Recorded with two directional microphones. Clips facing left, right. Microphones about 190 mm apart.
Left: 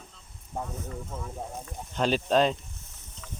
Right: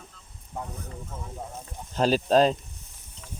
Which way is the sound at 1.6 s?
40° right (ahead or behind).